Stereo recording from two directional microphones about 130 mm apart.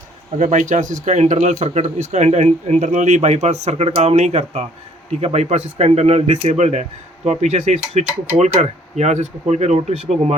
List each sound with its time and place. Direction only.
0.3 s speech: 70° right (ahead or behind)